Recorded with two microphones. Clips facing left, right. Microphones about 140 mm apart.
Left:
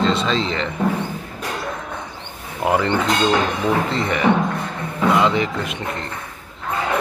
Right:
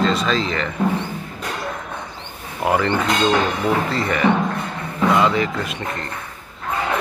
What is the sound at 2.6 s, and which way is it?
Speech, 20° left (ahead or behind).